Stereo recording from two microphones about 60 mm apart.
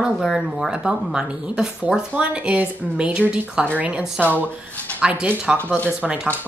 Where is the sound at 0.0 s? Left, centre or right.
Centre; by 4.0 s right.